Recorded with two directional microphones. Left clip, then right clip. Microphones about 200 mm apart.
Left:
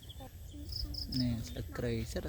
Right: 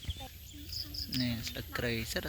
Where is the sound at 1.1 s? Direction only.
Centre (ahead or behind).